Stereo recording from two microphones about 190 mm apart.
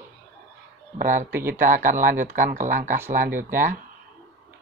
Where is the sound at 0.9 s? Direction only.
45° right (ahead or behind).